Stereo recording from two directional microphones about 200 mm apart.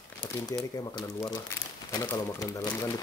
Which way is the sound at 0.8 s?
20° left (ahead or behind).